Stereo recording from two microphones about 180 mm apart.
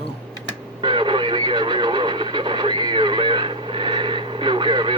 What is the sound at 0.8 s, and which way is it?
Radio, 25° right (ahead or behind).